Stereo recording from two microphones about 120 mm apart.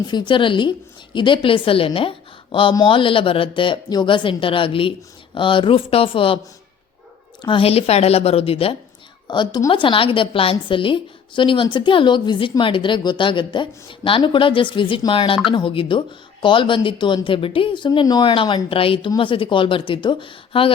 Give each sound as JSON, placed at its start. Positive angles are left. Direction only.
{"t": 0.1, "sound": "a woman's voice", "side_deg": 40}
{"t": 7.4, "sound": "a woman's voice", "side_deg": 50}
{"t": 9.2, "sound": "a woman's voice", "side_deg": 40}